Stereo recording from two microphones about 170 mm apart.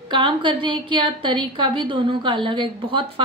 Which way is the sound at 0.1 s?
30° right (ahead or behind).